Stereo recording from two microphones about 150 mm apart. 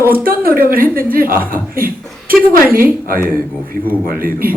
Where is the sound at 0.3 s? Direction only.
70° right (ahead or behind).